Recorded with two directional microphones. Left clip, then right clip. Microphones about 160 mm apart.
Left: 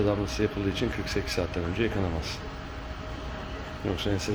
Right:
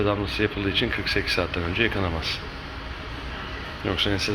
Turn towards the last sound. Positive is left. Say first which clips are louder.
# right 6 dB
turn(degrees=20)  # may be behind; listen again after turning